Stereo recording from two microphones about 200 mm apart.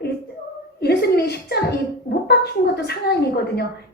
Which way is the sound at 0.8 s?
55° left (ahead or behind).